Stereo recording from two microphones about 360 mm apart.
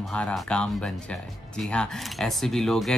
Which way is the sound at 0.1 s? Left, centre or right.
Centre.